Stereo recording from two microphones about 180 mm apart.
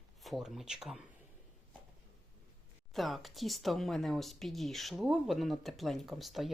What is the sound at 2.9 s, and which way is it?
Speech, centre (ahead or behind).